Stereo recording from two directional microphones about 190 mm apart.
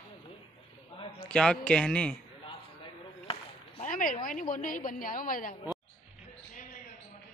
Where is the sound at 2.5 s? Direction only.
25° left (ahead or behind).